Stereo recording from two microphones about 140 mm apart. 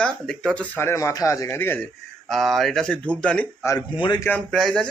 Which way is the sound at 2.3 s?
Centre (ahead or behind).